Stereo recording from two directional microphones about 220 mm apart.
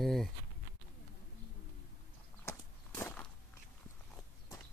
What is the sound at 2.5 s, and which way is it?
Walk, 10° left (ahead or behind).